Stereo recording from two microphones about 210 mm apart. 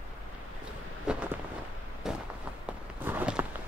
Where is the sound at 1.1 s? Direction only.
5° right (ahead or behind).